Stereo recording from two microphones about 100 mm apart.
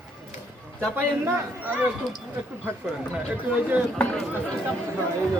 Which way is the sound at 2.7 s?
20° right (ahead or behind).